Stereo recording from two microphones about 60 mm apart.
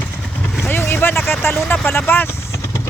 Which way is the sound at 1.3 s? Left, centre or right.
Left.